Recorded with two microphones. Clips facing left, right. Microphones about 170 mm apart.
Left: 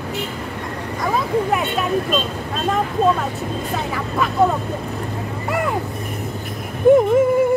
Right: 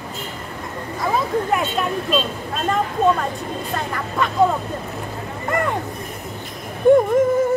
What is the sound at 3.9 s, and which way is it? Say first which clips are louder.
Speech: left 1 dB; 5° left (ahead or behind).